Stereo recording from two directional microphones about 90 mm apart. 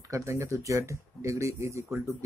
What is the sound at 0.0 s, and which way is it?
Speech, 35° right (ahead or behind).